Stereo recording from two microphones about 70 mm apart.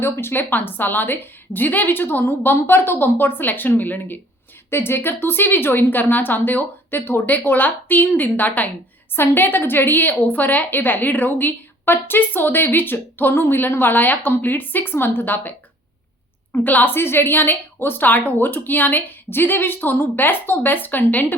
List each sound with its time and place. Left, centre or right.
0.0 s a woman's voice: left